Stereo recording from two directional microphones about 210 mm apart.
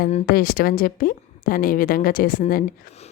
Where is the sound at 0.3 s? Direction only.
45° left (ahead or behind).